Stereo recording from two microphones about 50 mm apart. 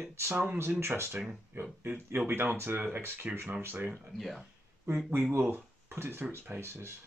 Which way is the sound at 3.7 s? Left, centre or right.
Right.